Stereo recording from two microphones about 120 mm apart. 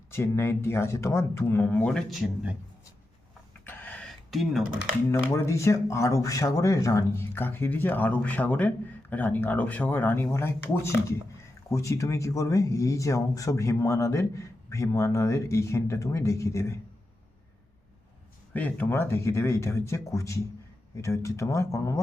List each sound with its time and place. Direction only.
0.1 s speech: 20° left (ahead or behind)
1.9 s speech: centre (ahead or behind)
3.6 s a sound: 15° left (ahead or behind)
4.0 s a sound: centre (ahead or behind)
5.3 s speech: 25° left (ahead or behind)
18.5 s speech: 15° left (ahead or behind)